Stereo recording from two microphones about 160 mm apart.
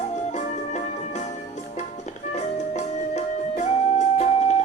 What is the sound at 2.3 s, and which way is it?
Music, 45° left (ahead or behind).